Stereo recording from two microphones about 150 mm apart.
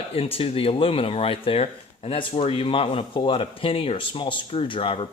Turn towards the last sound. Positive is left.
turn(degrees=35)  # may be behind; listen again after turning